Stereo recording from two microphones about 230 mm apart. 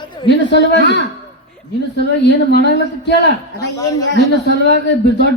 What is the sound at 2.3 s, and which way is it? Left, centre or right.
A man's voice, left.